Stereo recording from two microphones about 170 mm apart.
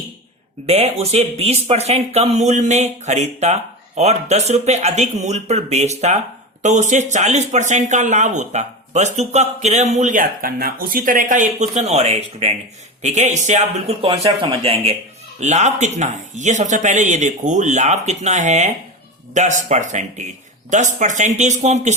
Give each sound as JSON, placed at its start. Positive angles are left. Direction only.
{"t": 0.7, "sound": "speech", "side_deg": -35}